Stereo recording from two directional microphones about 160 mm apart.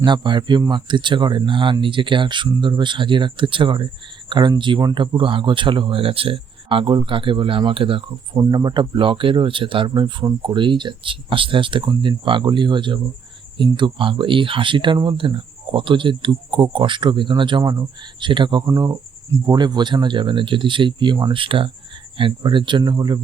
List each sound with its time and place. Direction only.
0.0 s speech: 30° right (ahead or behind)